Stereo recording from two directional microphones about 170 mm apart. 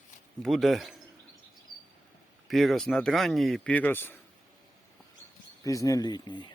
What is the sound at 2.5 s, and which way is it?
Speech, centre (ahead or behind).